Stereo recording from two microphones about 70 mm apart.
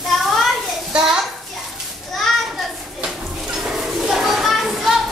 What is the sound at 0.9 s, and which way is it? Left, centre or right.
Children playing, centre.